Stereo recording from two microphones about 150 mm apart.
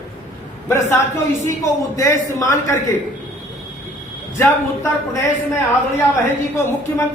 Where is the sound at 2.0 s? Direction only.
20° left (ahead or behind).